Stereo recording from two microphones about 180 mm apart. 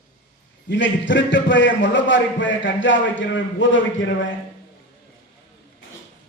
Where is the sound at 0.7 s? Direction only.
90° left.